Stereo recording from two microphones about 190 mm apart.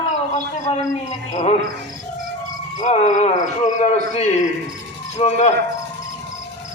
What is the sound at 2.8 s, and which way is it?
Speech, 35° left (ahead or behind).